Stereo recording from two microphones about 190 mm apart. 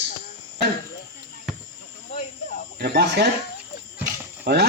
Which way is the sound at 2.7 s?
60° right (ahead or behind).